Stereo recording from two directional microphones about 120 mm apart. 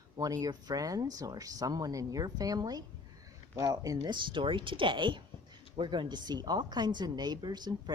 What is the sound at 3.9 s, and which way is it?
Speech, 40° right (ahead or behind).